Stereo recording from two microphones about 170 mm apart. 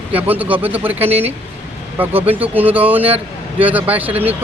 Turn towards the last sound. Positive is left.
turn(degrees=-10)  # may be behind; listen again after turning